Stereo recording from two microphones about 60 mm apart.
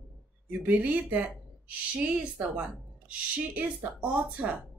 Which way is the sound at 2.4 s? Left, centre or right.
Centre.